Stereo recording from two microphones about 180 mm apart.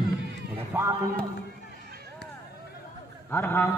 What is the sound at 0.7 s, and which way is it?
Speech, 10° right (ahead or behind).